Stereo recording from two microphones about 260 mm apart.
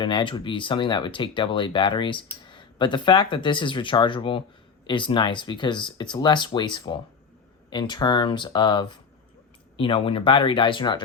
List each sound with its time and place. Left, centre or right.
0.0 s speech: centre